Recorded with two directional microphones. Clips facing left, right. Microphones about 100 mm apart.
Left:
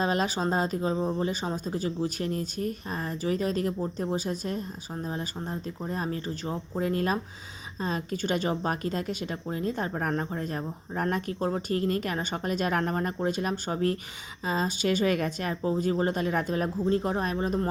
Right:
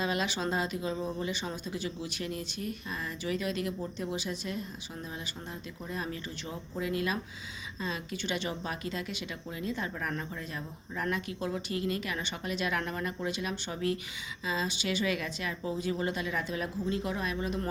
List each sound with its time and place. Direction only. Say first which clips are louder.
0.0 s speech: left 5 dB; 40° left (ahead or behind)